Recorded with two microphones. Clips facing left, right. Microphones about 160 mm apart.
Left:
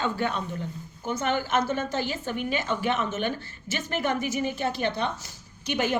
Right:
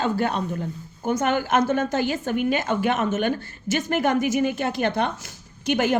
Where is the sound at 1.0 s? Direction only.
50° right (ahead or behind).